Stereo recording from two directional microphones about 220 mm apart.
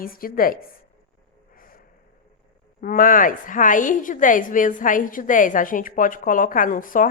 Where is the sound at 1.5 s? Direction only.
40° left (ahead or behind).